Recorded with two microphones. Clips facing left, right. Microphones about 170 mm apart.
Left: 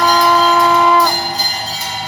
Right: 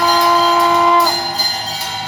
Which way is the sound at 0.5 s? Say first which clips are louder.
Left 1 dB; 20° right (ahead or behind).